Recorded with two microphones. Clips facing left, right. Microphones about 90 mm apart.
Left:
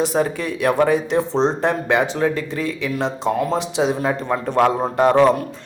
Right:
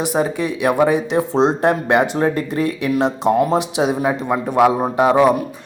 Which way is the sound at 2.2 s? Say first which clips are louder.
Right 3 dB; 50° right (ahead or behind).